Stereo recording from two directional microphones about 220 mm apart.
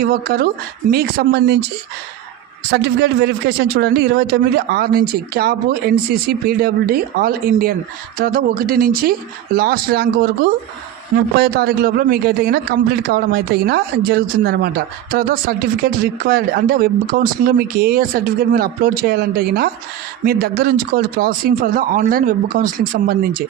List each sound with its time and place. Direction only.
0.0 s a man's voice: 45° right (ahead or behind)
2.6 s a man's voice: 50° right (ahead or behind)
11.3 s a man's voice: 45° right (ahead or behind)